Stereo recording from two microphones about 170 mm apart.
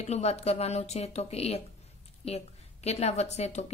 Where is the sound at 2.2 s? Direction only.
40° left (ahead or behind).